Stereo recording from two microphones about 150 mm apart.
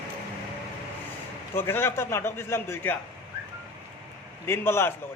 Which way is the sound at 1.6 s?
15° left (ahead or behind).